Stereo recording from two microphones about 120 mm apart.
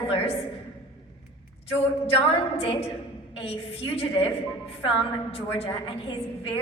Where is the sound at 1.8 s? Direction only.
55° left (ahead or behind).